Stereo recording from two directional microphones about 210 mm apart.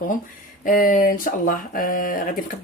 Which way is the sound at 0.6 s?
40° left (ahead or behind).